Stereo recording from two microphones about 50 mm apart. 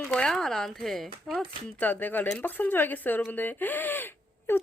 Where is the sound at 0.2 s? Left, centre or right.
Centre.